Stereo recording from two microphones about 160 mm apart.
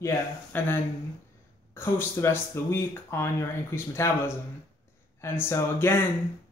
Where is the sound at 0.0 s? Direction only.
15° left (ahead or behind).